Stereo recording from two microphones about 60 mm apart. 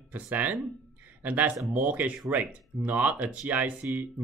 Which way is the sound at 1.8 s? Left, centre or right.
Right.